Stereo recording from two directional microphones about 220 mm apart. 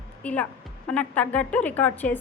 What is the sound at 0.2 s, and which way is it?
A woman's voice, 5° left (ahead or behind).